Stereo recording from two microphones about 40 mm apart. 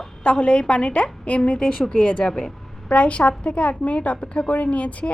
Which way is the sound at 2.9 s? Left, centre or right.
Left.